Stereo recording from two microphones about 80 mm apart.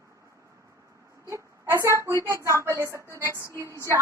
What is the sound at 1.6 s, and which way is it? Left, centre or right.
A woman's voice, right.